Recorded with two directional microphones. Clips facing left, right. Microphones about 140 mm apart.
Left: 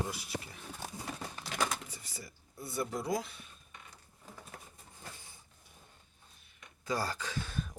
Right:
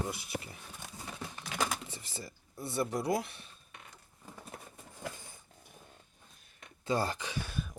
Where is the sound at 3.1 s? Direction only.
65° right (ahead or behind).